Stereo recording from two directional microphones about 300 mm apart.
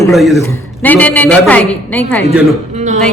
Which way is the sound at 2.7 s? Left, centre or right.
Right.